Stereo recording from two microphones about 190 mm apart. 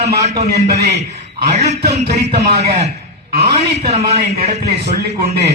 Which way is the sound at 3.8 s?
35° right (ahead or behind).